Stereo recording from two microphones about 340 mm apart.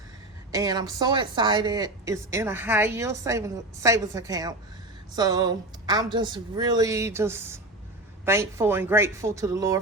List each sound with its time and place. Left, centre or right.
0.5 s speech: centre